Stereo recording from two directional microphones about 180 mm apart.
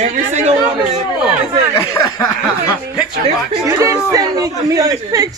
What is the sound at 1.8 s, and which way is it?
Speech, 20° left (ahead or behind).